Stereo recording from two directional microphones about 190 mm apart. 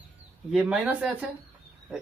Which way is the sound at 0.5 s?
5° right (ahead or behind).